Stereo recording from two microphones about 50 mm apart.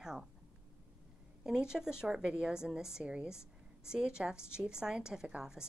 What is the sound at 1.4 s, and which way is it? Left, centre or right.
A woman's voice, centre.